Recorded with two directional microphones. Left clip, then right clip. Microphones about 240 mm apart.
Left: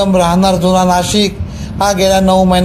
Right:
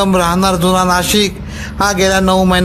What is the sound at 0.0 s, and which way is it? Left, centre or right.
Speech, right.